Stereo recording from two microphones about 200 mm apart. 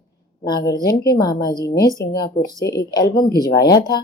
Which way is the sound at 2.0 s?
50° left (ahead or behind).